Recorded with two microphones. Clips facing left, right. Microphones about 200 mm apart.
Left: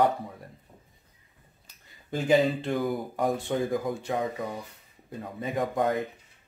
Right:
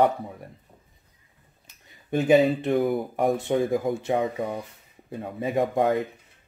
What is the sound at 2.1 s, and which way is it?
Speech, 20° right (ahead or behind).